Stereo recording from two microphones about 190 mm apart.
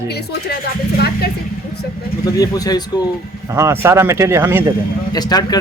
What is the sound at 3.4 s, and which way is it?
Speech, 15° right (ahead or behind).